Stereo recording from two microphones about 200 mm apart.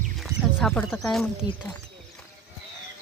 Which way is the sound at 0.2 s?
Centre (ahead or behind).